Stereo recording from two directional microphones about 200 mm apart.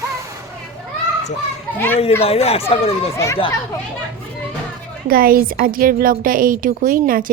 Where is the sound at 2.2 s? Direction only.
30° left (ahead or behind).